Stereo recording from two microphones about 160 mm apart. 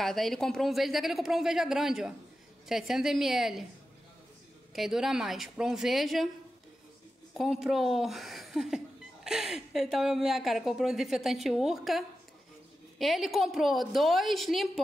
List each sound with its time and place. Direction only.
0.0 s speech: centre (ahead or behind)
4.7 s speech: centre (ahead or behind)
7.3 s speech: centre (ahead or behind)
13.0 s speech: centre (ahead or behind)